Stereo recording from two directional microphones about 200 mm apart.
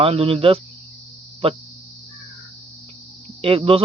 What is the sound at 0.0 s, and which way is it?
Speech, 30° right (ahead or behind).